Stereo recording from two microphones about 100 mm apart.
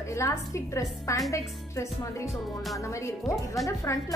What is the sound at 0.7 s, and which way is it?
Speech, 35° left (ahead or behind).